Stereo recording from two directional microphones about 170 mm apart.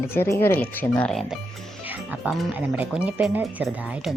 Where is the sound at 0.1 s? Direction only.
15° left (ahead or behind).